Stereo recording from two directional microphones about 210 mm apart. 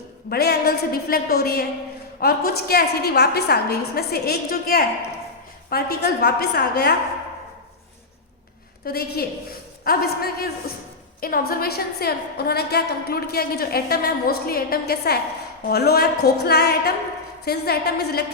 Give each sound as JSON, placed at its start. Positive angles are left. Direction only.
{"t": 0.3, "sound": "a woman's voice", "side_deg": 50}
{"t": 8.8, "sound": "a woman's voice", "side_deg": 45}